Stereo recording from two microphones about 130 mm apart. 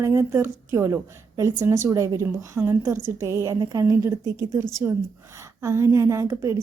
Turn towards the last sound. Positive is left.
turn(degrees=-20)  # may be behind; listen again after turning